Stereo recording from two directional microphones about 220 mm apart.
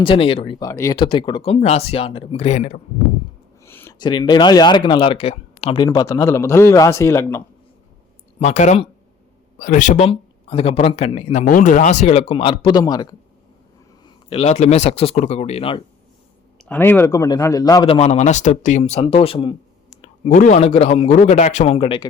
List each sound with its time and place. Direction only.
0.0 s speech: 25° left (ahead or behind)
3.6 s a sound: 10° left (ahead or behind)
4.0 s speech: 20° left (ahead or behind)
8.4 s speech: 30° left (ahead or behind)
16.6 s speech: 10° left (ahead or behind); by 19.5 s 25° left (ahead or behind)
20.0 s speech: 35° left (ahead or behind)